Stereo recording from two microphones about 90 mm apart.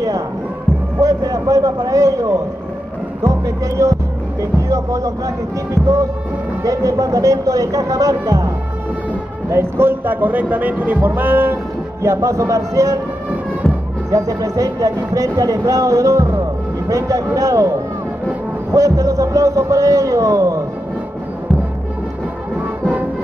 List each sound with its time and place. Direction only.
1.0 s a sound: 40° right (ahead or behind)
3.3 s speech: 35° right (ahead or behind)
5.8 s music: 5° right (ahead or behind)
6.6 s speech: 40° right (ahead or behind)
9.5 s speech: 30° right (ahead or behind)
12.0 s speech: 35° right (ahead or behind)
14.1 s speech: 40° right (ahead or behind)